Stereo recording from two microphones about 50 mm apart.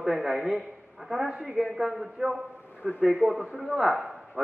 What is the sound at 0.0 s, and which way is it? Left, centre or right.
A man's voice, centre.